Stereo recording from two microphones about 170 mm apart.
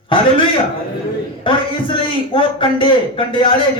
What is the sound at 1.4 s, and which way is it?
Speech, 30° left (ahead or behind).